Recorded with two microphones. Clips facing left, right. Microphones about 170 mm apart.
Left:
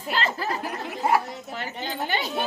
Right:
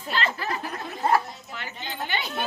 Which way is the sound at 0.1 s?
35° left (ahead or behind).